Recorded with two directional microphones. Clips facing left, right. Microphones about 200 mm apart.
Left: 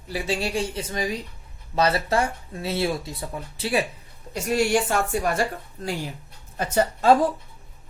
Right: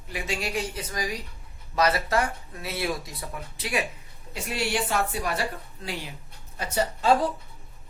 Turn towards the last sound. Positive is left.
turn(degrees=50)  # may be behind; listen again after turning